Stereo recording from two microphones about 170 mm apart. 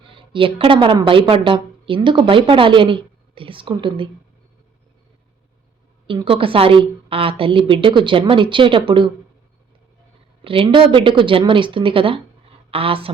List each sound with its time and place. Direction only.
0.0 s a woman's voice: 30° right (ahead or behind)
6.1 s a woman's voice: 30° right (ahead or behind)
10.4 s a woman's voice: 30° right (ahead or behind)